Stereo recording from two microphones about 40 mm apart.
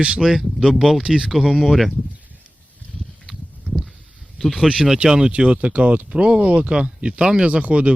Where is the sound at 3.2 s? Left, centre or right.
Centre.